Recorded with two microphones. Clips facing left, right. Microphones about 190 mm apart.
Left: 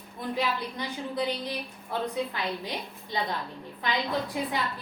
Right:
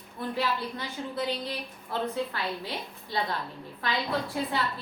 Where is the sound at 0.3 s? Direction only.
15° left (ahead or behind).